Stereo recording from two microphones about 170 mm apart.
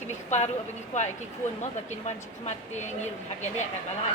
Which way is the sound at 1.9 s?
40° left (ahead or behind).